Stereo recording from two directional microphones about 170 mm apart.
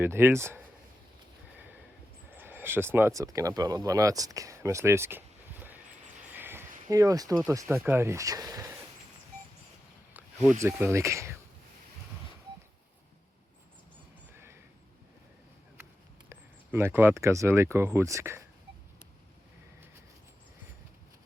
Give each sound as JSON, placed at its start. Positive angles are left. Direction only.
{"t": 0.0, "sound": "speech", "side_deg": -15}
{"t": 2.3, "sound": "a sound", "side_deg": -10}
{"t": 3.2, "sound": "speech", "side_deg": -20}
{"t": 6.3, "sound": "a sound", "side_deg": -10}
{"t": 6.8, "sound": "speech", "side_deg": -20}
{"t": 10.6, "sound": "speech", "side_deg": -15}
{"t": 14.3, "sound": "neigh", "side_deg": -15}
{"t": 16.3, "sound": "speech", "side_deg": -15}